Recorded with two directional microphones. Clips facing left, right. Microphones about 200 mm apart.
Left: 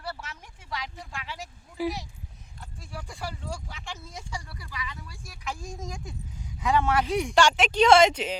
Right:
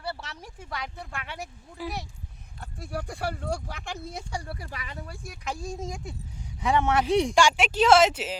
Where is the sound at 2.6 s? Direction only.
60° right (ahead or behind).